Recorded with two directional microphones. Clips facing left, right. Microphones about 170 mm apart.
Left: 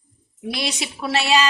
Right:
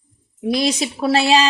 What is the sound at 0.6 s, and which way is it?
Speech, 40° right (ahead or behind).